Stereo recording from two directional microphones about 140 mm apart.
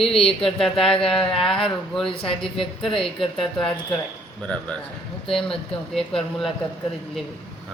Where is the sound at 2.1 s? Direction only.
40° left (ahead or behind).